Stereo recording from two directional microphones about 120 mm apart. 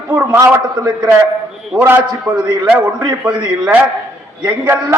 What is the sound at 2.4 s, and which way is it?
Speech, 40° right (ahead or behind).